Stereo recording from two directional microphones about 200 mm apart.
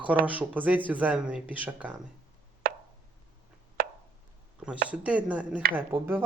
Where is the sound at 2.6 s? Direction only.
50° right (ahead or behind).